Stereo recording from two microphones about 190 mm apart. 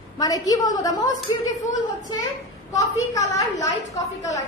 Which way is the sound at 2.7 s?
15° left (ahead or behind).